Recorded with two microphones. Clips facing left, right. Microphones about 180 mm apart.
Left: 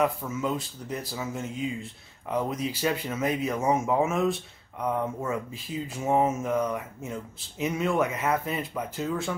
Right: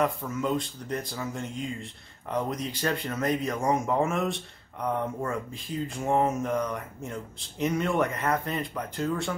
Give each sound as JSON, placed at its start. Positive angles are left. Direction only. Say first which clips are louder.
{"t": 0.0, "sound": "speech", "louder": "left 1 dB", "side_deg": 5}